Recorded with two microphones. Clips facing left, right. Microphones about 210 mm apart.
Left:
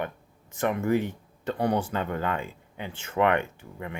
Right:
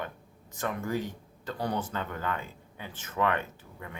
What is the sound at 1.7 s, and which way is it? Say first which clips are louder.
Speech: left 6 dB; 15° left (ahead or behind).